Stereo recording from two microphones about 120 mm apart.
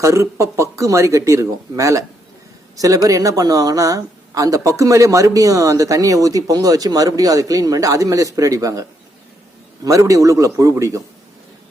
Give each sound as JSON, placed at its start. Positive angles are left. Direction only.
{"t": 0.0, "sound": "speech", "side_deg": -25}